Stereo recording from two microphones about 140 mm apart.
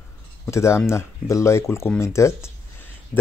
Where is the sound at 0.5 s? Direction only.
20° left (ahead or behind).